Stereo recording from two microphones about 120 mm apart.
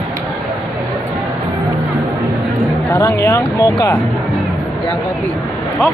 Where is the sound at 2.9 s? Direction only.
25° left (ahead or behind).